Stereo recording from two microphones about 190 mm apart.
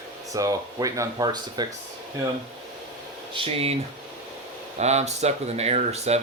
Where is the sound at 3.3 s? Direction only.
30° right (ahead or behind).